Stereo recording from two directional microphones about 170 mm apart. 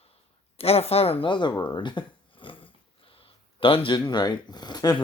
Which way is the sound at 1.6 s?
30° left (ahead or behind).